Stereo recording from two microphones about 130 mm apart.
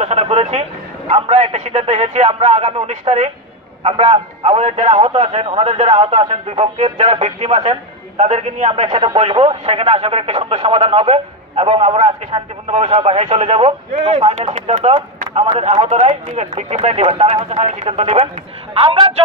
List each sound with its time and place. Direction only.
0.0 s a man's voice: 55° right (ahead or behind)
3.8 s a man's voice: 45° right (ahead or behind)